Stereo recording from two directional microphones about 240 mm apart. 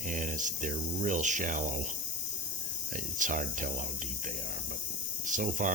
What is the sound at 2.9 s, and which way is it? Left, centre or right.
Speech, right.